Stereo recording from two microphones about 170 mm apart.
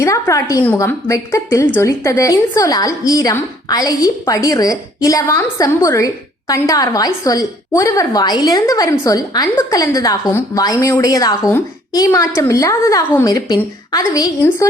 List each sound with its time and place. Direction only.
0.0 s a woman's voice: 20° left (ahead or behind)